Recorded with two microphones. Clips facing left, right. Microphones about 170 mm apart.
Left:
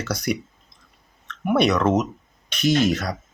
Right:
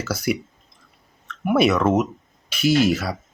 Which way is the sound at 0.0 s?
5° right (ahead or behind).